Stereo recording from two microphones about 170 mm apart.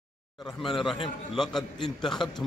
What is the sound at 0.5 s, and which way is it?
A man's voice, centre (ahead or behind).